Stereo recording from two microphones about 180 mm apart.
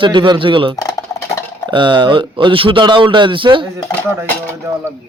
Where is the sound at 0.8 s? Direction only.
20° left (ahead or behind).